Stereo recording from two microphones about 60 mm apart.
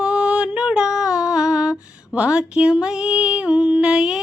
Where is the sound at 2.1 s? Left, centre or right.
Centre.